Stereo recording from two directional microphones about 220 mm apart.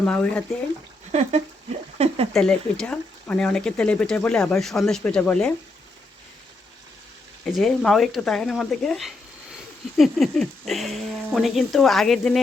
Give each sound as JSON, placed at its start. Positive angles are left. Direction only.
{"t": 0.0, "sound": "speech", "side_deg": 5}
{"t": 1.1, "sound": "speech", "side_deg": -30}
{"t": 2.3, "sound": "speech", "side_deg": 5}
{"t": 7.4, "sound": "speech", "side_deg": 0}